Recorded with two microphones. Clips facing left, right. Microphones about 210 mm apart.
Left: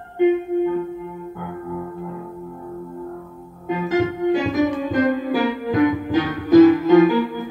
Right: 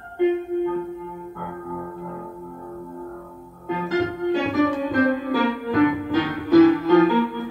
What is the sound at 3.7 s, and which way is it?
Music, 15° left (ahead or behind).